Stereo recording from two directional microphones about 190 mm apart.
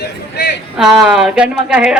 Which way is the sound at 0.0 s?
60° left (ahead or behind).